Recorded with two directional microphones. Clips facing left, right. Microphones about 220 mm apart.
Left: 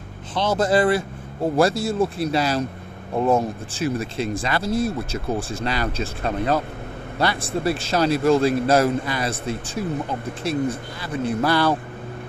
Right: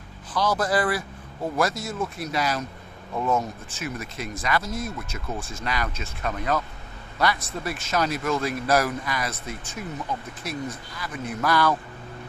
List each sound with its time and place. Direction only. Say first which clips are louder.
0.3 s speech: left 4 dB; 25° left (ahead or behind)